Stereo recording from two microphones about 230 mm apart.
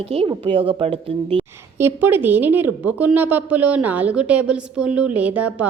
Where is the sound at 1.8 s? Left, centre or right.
Centre.